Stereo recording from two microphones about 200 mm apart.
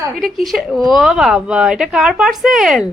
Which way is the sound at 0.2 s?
Centre (ahead or behind).